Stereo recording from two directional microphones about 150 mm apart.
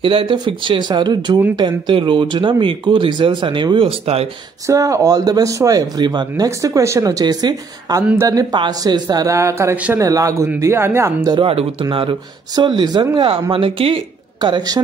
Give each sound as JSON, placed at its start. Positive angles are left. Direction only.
{"t": 0.0, "sound": "speech", "side_deg": -35}
{"t": 4.6, "sound": "speech", "side_deg": -20}
{"t": 11.3, "sound": "speech", "side_deg": -35}
{"t": 13.5, "sound": "speech", "side_deg": -35}